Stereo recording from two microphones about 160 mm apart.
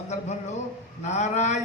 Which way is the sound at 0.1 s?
45° left (ahead or behind).